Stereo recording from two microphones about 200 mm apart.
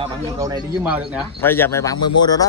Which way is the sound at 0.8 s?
5° right (ahead or behind).